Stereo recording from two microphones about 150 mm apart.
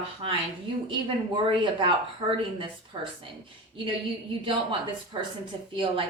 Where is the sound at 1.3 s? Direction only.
35° right (ahead or behind).